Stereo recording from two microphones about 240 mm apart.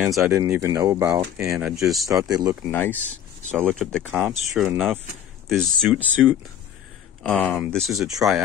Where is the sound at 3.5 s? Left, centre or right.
Centre.